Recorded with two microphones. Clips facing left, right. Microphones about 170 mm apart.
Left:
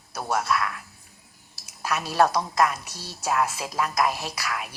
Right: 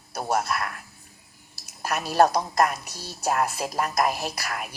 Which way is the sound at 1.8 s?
50° right (ahead or behind).